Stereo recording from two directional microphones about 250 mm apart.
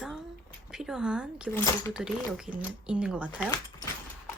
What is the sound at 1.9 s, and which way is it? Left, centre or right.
Speech, centre.